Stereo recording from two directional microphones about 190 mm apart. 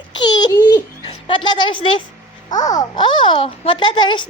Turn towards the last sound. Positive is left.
turn(degrees=25)  # may be behind; listen again after turning